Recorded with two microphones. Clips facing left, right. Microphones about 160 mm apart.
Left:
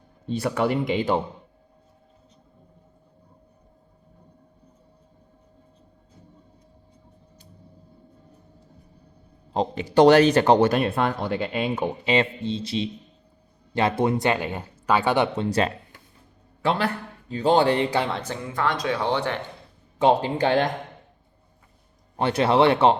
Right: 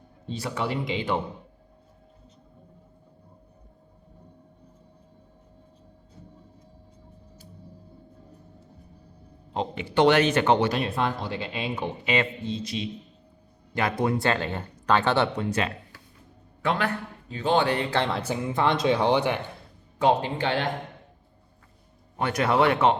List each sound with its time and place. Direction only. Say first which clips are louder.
0.3 s speech: left 6 dB; 55° left (ahead or behind)
9.5 s speech: left 4 dB; 35° left (ahead or behind)
12.0 s a man's voice: left 3 dB; 30° left (ahead or behind); by 15.3 s 15° left (ahead or behind)
15.4 s a man's voice: left 4 dB; 35° left (ahead or behind)
18.1 s speech: right 1 dB; 10° right (ahead or behind)
18.5 s speech: right 2 dB; 25° right (ahead or behind)
20.0 s speech: left 3 dB; 25° left (ahead or behind)
20.4 s speech: left 6 dB; 45° left (ahead or behind)
22.2 s speech: left 4 dB; 30° left (ahead or behind)